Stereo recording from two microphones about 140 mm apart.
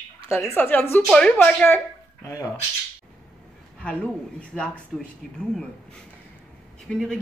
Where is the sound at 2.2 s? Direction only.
20° left (ahead or behind).